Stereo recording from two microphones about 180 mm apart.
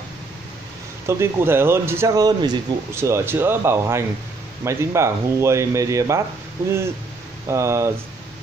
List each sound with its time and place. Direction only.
1.0 s speech: 15° right (ahead or behind)
7.4 s speech: 15° right (ahead or behind)